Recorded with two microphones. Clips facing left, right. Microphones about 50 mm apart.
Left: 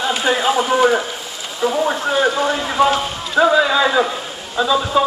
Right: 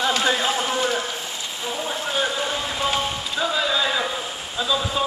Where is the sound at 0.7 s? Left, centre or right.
Left.